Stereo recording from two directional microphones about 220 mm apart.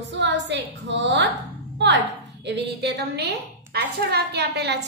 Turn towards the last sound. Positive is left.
turn(degrees=-50)  # may be behind; listen again after turning